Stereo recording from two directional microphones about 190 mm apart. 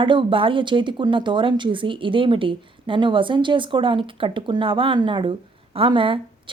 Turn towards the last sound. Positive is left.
turn(degrees=-25)  # may be behind; listen again after turning